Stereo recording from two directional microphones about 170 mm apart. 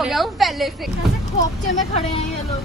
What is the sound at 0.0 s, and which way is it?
Speech, centre (ahead or behind).